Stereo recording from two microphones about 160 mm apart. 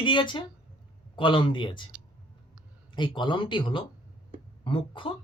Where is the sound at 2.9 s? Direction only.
30° left (ahead or behind).